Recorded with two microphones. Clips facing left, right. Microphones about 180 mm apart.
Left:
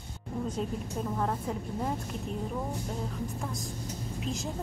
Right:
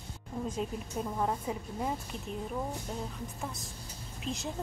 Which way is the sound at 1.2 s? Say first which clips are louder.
Right 1 dB; 5° right (ahead or behind).